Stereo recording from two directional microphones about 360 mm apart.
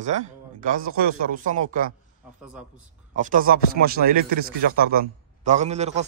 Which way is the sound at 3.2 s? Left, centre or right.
Right.